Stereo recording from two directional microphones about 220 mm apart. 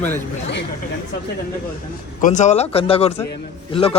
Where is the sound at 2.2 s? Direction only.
35° left (ahead or behind).